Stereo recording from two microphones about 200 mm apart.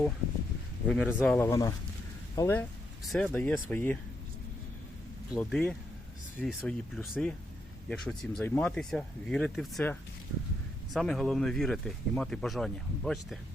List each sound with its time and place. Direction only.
0.9 s speech: centre (ahead or behind)
1.5 s speech: 15° left (ahead or behind)
3.0 s speech: centre (ahead or behind)
5.4 s speech: 5° left (ahead or behind)